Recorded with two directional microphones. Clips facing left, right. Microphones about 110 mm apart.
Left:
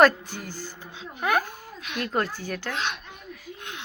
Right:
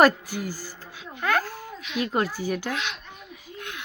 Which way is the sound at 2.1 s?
10° right (ahead or behind).